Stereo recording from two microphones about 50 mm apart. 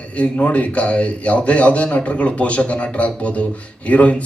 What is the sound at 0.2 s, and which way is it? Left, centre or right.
A man's voice, left.